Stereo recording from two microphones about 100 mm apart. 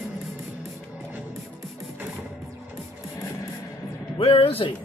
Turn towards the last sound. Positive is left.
turn(degrees=70)  # may be behind; listen again after turning